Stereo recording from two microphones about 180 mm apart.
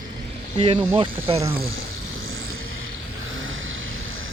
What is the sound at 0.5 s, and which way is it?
Speech, 40° right (ahead or behind).